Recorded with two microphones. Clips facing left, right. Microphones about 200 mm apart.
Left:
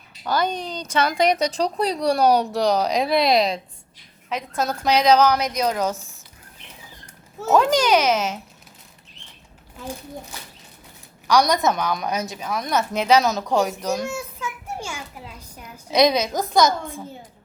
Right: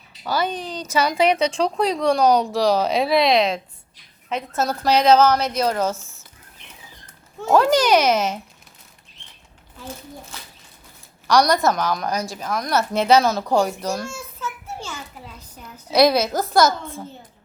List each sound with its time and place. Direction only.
0.3 s a woman's voice: 5° right (ahead or behind)
1.3 s speech: 40° left (ahead or behind)
2.0 s a woman's voice: 5° left (ahead or behind)
7.5 s a child's voice: 5° right (ahead or behind)
11.3 s a woman's voice: 15° left (ahead or behind)
11.7 s a woman's voice: centre (ahead or behind)
13.2 s a woman's voice: centre (ahead or behind)
13.9 s a sound: 15° left (ahead or behind)
15.9 s a woman's voice: 15° left (ahead or behind)